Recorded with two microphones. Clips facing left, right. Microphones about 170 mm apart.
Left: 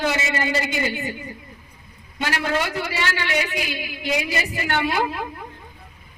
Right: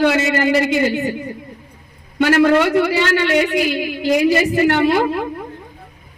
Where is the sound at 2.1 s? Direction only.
60° right (ahead or behind).